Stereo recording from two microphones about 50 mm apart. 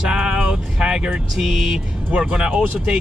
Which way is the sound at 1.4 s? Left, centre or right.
Centre.